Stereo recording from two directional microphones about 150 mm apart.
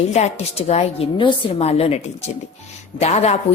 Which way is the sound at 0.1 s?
50° left (ahead or behind).